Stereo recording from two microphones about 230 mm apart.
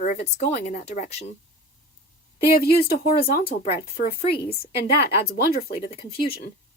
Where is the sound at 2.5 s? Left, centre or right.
Left.